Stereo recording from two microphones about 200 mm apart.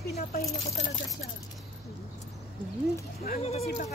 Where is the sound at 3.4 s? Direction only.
30° left (ahead or behind).